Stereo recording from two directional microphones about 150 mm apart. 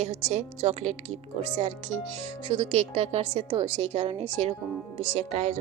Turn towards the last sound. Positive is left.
turn(degrees=-50)  # may be behind; listen again after turning